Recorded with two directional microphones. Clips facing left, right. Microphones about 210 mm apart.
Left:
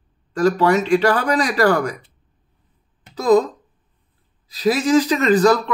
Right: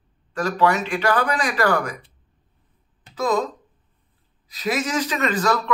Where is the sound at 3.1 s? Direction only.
35° left (ahead or behind).